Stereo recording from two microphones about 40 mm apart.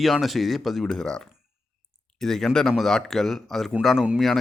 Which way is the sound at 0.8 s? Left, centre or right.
Centre.